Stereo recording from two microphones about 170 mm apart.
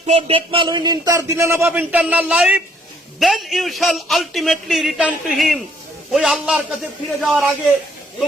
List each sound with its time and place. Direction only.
0.0 s a man's voice: 35° right (ahead or behind); by 7.4 s centre (ahead or behind)